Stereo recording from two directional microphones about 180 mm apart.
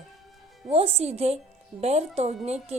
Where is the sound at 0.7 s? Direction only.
35° right (ahead or behind).